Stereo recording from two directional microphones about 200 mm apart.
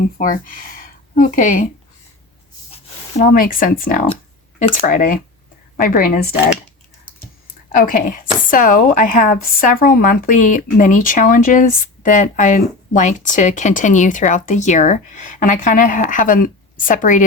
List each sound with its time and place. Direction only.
0.2 s speech: 45° left (ahead or behind)
3.2 s a woman's voice: 45° left (ahead or behind)
7.8 s speech: 40° left (ahead or behind)